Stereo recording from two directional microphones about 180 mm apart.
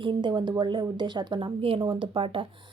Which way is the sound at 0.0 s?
25° right (ahead or behind).